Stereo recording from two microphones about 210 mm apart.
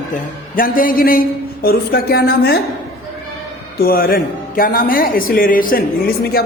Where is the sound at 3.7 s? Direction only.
45° left (ahead or behind).